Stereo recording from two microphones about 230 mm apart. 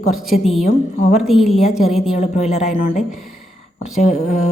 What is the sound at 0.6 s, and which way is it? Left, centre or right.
Speech, left.